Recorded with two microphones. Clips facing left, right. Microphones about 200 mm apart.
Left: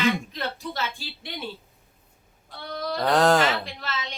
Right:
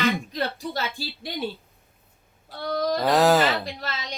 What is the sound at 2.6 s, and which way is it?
Speech, 40° right (ahead or behind).